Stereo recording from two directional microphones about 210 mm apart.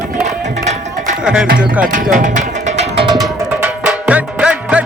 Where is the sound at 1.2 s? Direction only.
5° right (ahead or behind).